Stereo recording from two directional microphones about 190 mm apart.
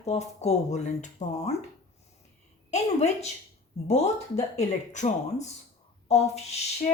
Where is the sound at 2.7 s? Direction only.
35° left (ahead or behind).